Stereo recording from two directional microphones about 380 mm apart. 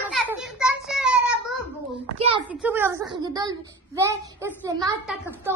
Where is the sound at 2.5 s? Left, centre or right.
Centre.